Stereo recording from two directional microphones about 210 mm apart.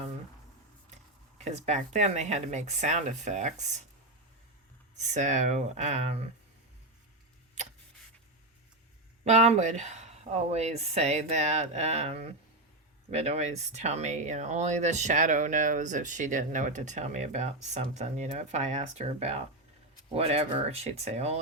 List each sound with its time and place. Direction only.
1.4 s speech: 35° right (ahead or behind)
4.9 s speech: 35° right (ahead or behind)
9.2 s speech: 35° right (ahead or behind)